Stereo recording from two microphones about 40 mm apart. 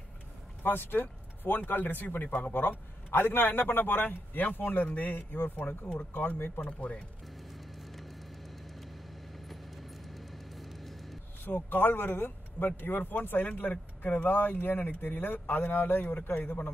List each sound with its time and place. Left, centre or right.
0.7 s a man's voice: left
6.6 s speech: left
7.3 s vehicle: centre
11.5 s a man's voice: left